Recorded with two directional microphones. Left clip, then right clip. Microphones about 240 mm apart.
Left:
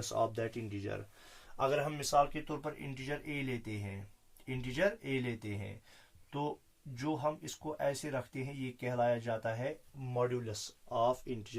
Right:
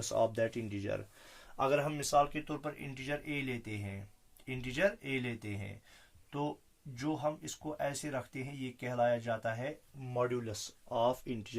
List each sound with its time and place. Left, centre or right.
0.0 s speech: right
2.0 s speech: centre
7.0 s speech: centre; by 11.5 s right